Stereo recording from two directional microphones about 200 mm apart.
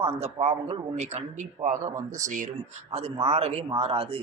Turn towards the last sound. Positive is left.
turn(degrees=-25)  # may be behind; listen again after turning